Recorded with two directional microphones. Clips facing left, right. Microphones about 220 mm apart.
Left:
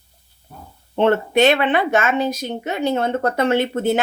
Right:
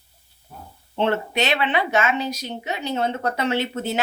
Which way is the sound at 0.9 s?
50° left (ahead or behind).